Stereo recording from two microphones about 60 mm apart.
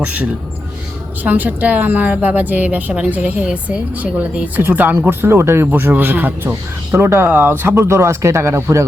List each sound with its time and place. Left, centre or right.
0.0 s a woman's voice: right
4.9 s speech: right
7.3 s speech: right